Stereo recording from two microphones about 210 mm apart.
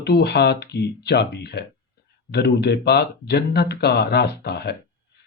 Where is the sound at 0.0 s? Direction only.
50° left (ahead or behind).